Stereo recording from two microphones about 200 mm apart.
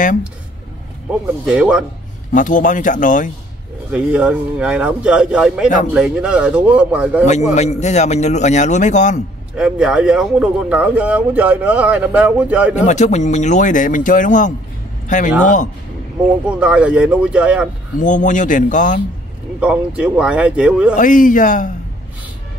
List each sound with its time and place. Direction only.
1.4 s a man's voice: 5° right (ahead or behind)
2.3 s a man's voice: 40° left (ahead or behind)
3.9 s a man's voice: 5° right (ahead or behind)
7.2 s a man's voice: 35° left (ahead or behind)
9.6 s speech: 5° right (ahead or behind)
12.7 s a man's voice: 35° left (ahead or behind)
16.4 s a man's voice: 5° right (ahead or behind)
17.9 s a man's voice: 40° left (ahead or behind)
19.6 s a man's voice: 5° right (ahead or behind)
20.9 s a man's voice: 40° left (ahead or behind)